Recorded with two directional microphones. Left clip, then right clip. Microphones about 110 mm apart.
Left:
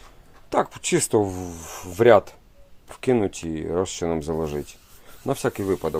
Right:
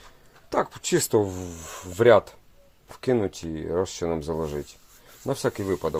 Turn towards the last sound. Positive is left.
turn(degrees=15)  # may be behind; listen again after turning